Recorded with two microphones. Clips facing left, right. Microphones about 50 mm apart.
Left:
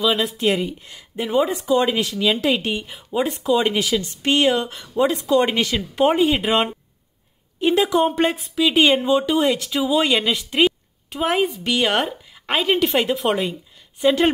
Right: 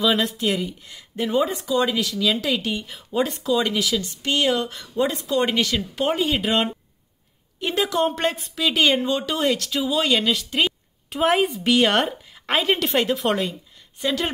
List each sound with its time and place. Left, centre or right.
0.0 s a woman's voice: centre
0.3 s speech: left
0.9 s speech: centre
1.5 s speech: left
2.9 s speech: centre
11.1 s a woman's voice: centre
14.0 s speech: left